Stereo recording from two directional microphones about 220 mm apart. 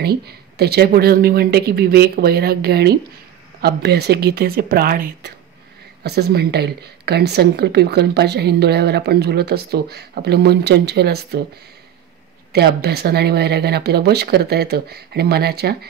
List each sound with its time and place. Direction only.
0.0 s speech: 45° right (ahead or behind)
12.5 s speech: 45° right (ahead or behind)